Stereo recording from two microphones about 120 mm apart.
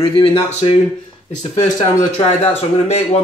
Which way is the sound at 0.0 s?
50° left (ahead or behind).